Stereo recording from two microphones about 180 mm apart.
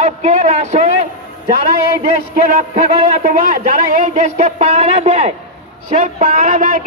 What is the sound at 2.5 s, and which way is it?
A man's voice, 40° right (ahead or behind).